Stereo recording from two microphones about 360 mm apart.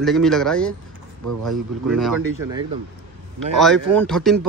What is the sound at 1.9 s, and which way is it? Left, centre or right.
Speech, centre.